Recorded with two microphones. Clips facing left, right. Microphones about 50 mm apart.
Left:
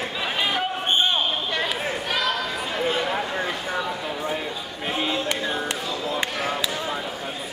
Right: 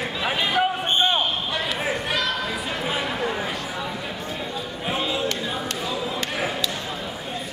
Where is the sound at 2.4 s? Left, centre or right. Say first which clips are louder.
Left 1 dB; centre.